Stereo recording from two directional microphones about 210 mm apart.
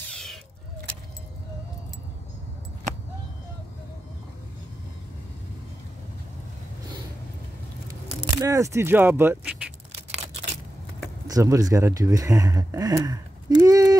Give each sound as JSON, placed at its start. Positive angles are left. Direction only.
{"t": 0.1, "sound": "vehicle", "side_deg": 0}
{"t": 8.4, "sound": "speech", "side_deg": -15}
{"t": 9.9, "sound": "scissors", "side_deg": -30}
{"t": 11.2, "sound": "speech", "side_deg": -15}